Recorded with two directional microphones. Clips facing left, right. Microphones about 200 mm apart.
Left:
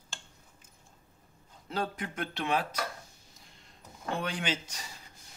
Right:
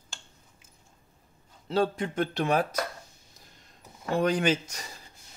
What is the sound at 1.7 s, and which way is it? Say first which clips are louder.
A man's voice: right 8 dB; 30° right (ahead or behind).